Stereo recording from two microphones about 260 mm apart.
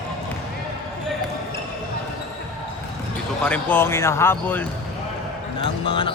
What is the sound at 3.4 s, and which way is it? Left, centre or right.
Speech, centre.